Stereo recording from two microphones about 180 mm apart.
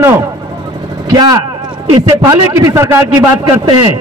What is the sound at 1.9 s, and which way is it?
A man's voice, 20° right (ahead or behind).